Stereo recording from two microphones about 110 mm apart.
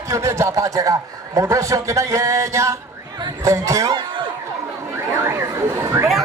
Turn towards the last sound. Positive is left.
turn(degrees=-25)  # may be behind; listen again after turning